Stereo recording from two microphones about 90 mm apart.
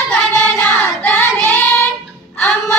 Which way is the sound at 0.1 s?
15° left (ahead or behind).